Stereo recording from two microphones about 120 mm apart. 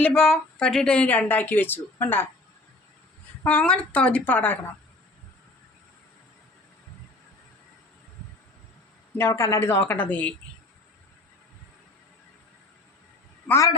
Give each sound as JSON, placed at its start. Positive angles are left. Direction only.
{"t": 0.0, "sound": "speech", "side_deg": 5}
{"t": 3.4, "sound": "speech", "side_deg": 10}
{"t": 9.1, "sound": "a woman's voice", "side_deg": 20}